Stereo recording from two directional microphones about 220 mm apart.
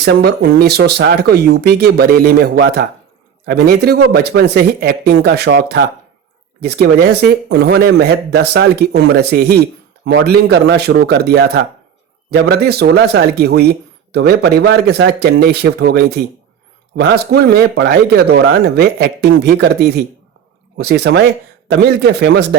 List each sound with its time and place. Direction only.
0.0 s speech: 45° right (ahead or behind)